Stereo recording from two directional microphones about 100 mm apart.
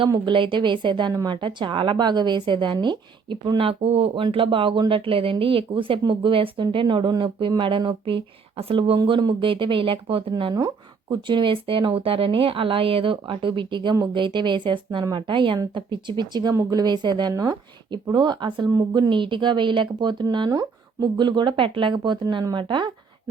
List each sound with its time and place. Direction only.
0.3 s speech: 55° right (ahead or behind)
3.7 s speech: 80° right
9.0 s speech: 50° right (ahead or behind)